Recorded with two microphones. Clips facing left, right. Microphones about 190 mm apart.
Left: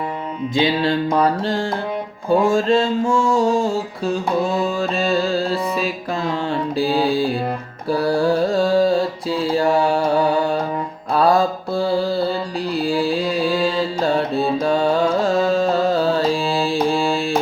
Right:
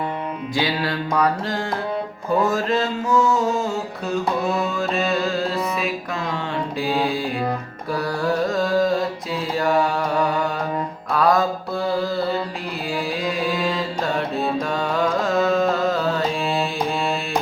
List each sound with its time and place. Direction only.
0.5 s a sound: 25° left (ahead or behind)
4.6 s music: 30° left (ahead or behind)
7.9 s mantra: 30° left (ahead or behind)
12.9 s music: 30° left (ahead or behind)